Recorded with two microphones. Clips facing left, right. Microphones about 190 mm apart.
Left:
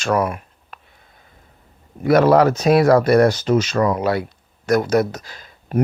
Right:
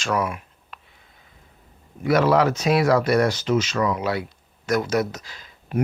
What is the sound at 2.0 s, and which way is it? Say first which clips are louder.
Speech: left 5 dB; 50° left (ahead or behind).